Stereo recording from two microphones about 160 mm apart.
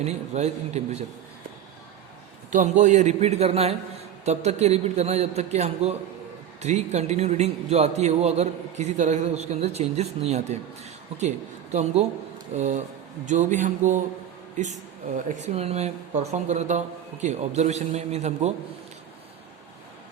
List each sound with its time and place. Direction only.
0.0 s speech: 45° right (ahead or behind)
2.5 s speech: 50° right (ahead or behind)